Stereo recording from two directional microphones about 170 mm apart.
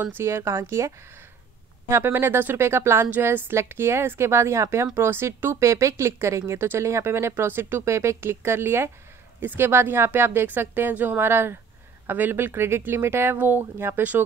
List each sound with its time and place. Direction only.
0.2 s speech: 15° right (ahead or behind)